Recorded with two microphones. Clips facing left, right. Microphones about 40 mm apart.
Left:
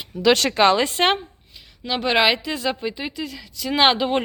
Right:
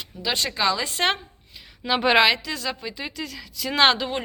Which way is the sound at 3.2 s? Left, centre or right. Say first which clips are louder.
Left 2 dB; centre.